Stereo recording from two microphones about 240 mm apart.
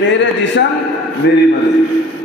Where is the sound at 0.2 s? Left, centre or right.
Left.